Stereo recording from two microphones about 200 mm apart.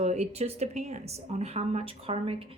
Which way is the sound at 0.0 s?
35° right (ahead or behind).